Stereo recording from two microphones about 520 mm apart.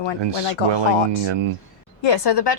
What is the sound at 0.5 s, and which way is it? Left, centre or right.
Speech, right.